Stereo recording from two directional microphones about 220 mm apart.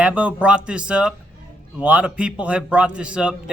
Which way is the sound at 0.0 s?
5° right (ahead or behind).